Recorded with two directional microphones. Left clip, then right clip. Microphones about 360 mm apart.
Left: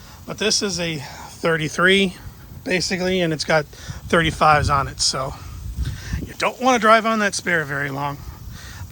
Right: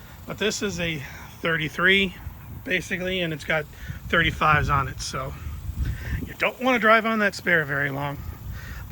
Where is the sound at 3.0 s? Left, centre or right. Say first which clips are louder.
Left 6 dB; left.